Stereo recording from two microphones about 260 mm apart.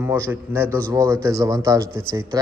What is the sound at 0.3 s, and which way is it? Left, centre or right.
Speech, centre.